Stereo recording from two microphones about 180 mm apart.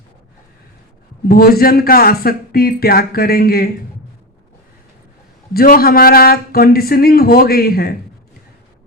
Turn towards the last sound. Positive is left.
turn(degrees=55)  # may be behind; listen again after turning